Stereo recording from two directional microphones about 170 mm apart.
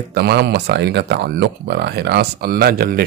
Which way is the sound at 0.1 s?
75° right (ahead or behind).